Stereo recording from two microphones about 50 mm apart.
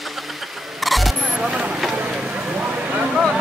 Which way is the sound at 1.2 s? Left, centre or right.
Centre.